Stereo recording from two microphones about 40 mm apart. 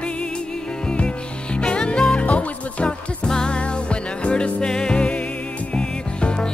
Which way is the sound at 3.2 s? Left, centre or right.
Centre.